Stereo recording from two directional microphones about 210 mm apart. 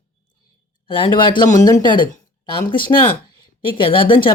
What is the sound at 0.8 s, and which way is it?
Speech, 25° left (ahead or behind).